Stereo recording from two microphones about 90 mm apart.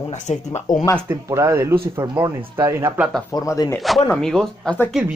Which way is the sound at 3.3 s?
40° left (ahead or behind).